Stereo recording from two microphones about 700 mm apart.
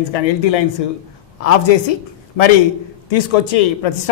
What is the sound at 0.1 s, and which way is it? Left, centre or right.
Speech, left.